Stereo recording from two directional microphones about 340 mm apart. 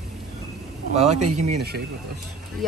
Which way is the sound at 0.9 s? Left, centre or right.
Centre.